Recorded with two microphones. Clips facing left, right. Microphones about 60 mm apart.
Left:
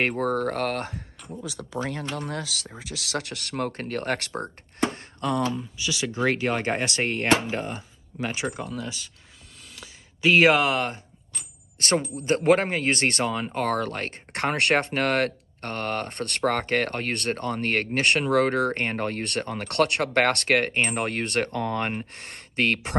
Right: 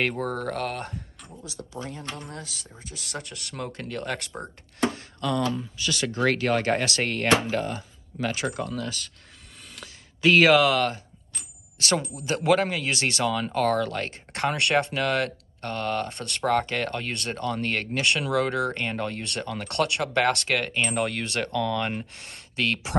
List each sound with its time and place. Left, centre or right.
0.2 s speech: left
1.8 s speech: left
4.9 s speech: left
5.8 s speech: centre
10.2 s speech: left
11.8 s speech: left